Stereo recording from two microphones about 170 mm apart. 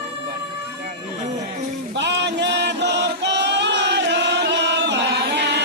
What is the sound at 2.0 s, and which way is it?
Chant, 90° right.